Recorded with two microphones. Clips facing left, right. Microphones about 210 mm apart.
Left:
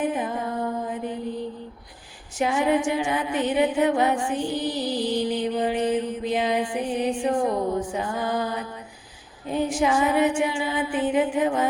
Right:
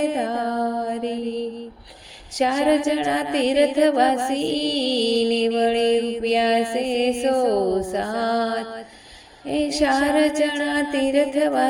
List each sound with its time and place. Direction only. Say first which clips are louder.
0.0 s music: right 4 dB; 90° right
0.8 s mantra: right 5 dB; 90° right
2.4 s music: right 4 dB; 90° right
7.6 s music: right 5 dB; 40° right (ahead or behind)
7.9 s music: right 4 dB; 90° right